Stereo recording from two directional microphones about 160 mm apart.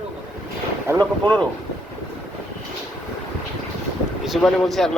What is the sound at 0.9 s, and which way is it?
Speech, 25° right (ahead or behind).